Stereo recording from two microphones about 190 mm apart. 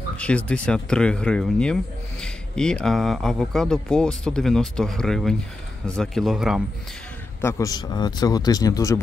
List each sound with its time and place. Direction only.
0.5 s speech: 5° left (ahead or behind)
7.4 s speech: 15° left (ahead or behind)